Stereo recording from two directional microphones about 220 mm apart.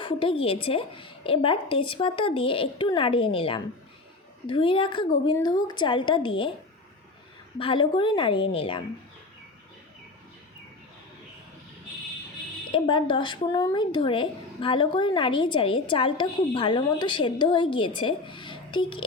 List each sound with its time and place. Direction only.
0.0 s speech: 25° left (ahead or behind)
7.6 s speech: 25° left (ahead or behind)
12.7 s speech: 20° left (ahead or behind)